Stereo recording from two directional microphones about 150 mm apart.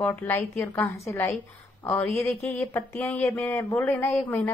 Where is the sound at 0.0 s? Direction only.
10° left (ahead or behind).